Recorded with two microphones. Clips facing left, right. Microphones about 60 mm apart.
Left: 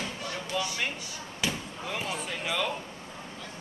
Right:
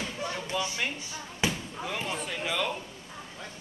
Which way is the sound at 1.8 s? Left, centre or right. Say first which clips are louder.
Even; centre.